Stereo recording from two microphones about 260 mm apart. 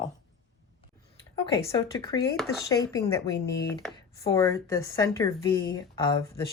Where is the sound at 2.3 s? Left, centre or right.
Centre.